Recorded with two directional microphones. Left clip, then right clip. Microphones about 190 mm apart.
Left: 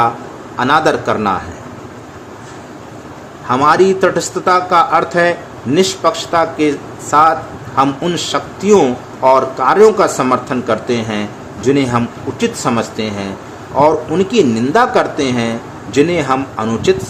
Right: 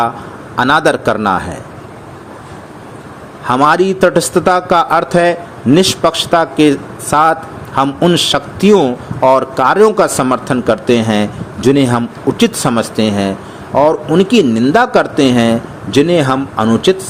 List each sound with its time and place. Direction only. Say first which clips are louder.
0.5 s a man's voice: right 1 dB; 40° right (ahead or behind)
3.4 s a man's voice: even; 35° right (ahead or behind)